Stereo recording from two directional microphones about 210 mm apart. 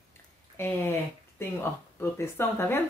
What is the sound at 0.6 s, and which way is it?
A woman's voice, 10° left (ahead or behind).